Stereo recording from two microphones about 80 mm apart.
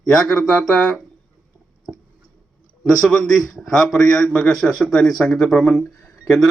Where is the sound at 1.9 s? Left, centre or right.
Centre.